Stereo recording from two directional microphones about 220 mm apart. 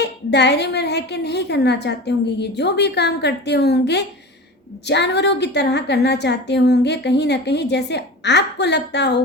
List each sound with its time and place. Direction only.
0.0 s a woman's voice: 50° left (ahead or behind)